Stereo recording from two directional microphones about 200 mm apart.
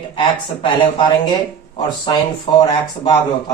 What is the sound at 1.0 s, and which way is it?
Speech, 25° left (ahead or behind).